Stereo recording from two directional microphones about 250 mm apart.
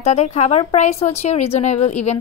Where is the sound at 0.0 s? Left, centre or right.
Left.